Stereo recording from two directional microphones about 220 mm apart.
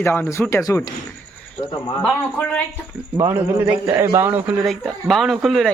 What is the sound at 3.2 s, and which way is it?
A man's voice, 10° right (ahead or behind).